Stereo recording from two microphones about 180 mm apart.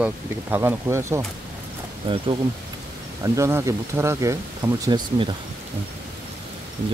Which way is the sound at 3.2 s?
15° right (ahead or behind).